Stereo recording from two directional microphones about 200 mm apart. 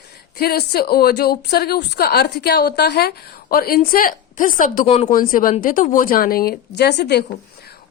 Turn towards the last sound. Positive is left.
turn(degrees=55)  # may be behind; listen again after turning